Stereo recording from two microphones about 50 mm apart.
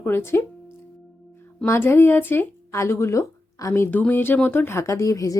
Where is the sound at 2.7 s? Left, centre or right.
Left.